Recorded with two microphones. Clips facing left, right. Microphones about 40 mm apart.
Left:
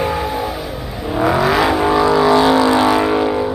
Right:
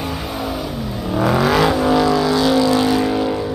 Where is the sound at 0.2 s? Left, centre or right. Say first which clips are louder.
Left 3 dB; centre.